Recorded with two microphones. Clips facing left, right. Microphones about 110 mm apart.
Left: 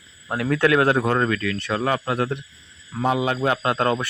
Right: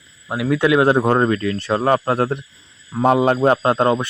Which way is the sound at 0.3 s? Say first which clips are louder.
Right 3 dB; 10° right (ahead or behind).